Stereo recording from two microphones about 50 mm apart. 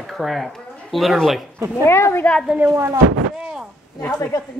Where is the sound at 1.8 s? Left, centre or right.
Left.